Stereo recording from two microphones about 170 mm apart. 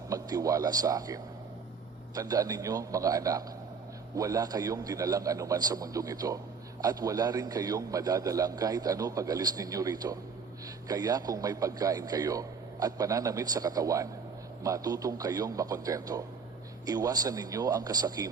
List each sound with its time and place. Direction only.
0.1 s a man's voice: 20° right (ahead or behind)